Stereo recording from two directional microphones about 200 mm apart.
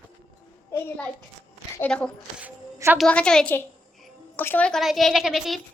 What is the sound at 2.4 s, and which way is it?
Music, 10° right (ahead or behind).